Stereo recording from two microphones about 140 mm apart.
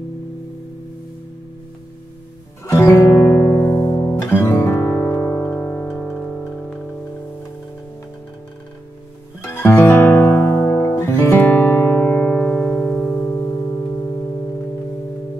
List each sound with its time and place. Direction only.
2.6 s music: 20° left (ahead or behind)
3.7 s music: 35° left (ahead or behind)
4.3 s music: 15° left (ahead or behind)
9.4 s music: 15° left (ahead or behind)